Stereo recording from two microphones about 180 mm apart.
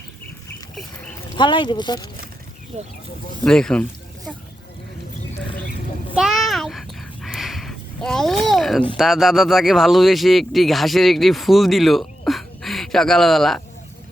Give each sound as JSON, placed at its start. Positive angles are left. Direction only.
{"t": 1.4, "sound": "speech", "side_deg": 25}
{"t": 2.7, "sound": "speech", "side_deg": -35}
{"t": 3.4, "sound": "speech", "side_deg": 5}
{"t": 6.1, "sound": "a sound", "side_deg": 0}
{"t": 9.0, "sound": "speech", "side_deg": 0}